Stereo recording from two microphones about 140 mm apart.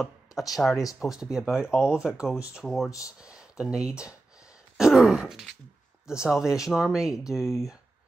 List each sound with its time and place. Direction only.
0.6 s speech: 5° left (ahead or behind)